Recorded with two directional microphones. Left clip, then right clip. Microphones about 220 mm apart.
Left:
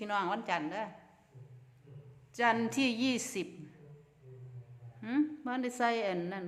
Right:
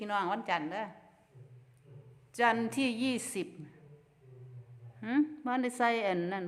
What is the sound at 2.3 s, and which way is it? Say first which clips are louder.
A woman's voice: right 1 dB; 15° right (ahead or behind).